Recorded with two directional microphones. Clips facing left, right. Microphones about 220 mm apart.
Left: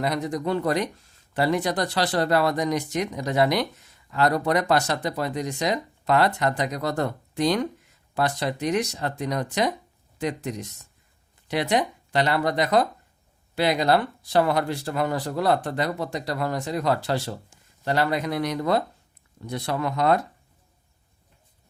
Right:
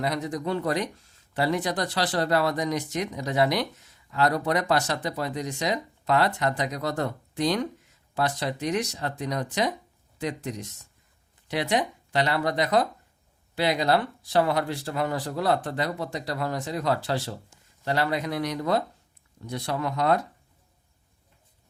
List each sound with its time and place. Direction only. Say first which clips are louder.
0.0 s speech: left 2 dB; 50° left (ahead or behind)